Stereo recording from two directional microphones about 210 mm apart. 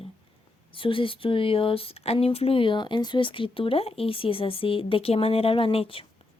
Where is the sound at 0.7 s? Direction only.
25° left (ahead or behind).